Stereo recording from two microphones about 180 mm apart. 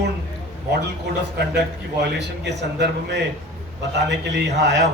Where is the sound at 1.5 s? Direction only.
70° right (ahead or behind).